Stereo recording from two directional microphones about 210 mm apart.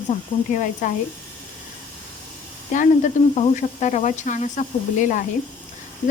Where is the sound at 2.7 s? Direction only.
35° left (ahead or behind).